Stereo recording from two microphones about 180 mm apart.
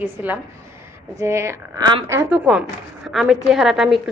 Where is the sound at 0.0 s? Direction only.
10° right (ahead or behind); by 2.0 s 25° right (ahead or behind).